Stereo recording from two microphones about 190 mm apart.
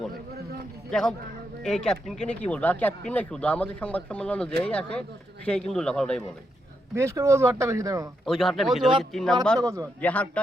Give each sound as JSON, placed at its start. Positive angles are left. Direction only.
{"t": 0.9, "sound": "a man's voice", "side_deg": 5}
{"t": 6.9, "sound": "speech", "side_deg": -15}
{"t": 8.2, "sound": "a man's voice", "side_deg": 0}
{"t": 9.6, "sound": "speech", "side_deg": -15}
{"t": 10.0, "sound": "speech", "side_deg": 5}